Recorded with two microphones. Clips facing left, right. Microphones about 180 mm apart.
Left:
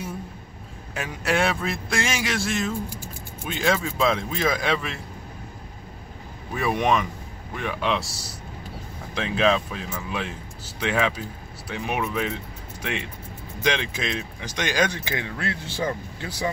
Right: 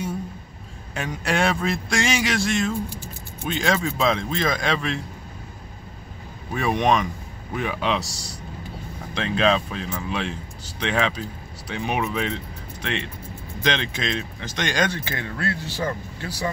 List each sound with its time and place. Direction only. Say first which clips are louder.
0.9 s speech: even; 5° left (ahead or behind)
6.5 s speech: right 1 dB; 5° left (ahead or behind); by 16.4 s 20° left (ahead or behind)